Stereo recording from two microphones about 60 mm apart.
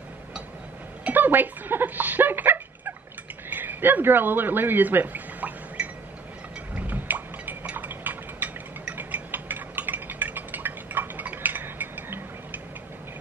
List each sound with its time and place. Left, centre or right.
1.1 s turkey: right
3.4 s speech: right
6.7 s a sound: right